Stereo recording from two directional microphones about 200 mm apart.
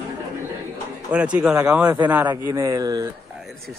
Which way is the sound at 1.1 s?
5° right (ahead or behind).